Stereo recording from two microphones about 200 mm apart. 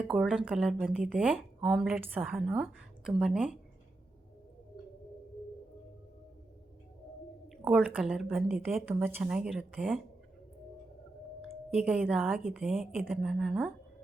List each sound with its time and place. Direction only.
0.0 s speech: 5° right (ahead or behind)
7.4 s speech: 5° right (ahead or behind)
11.4 s speech: 5° right (ahead or behind)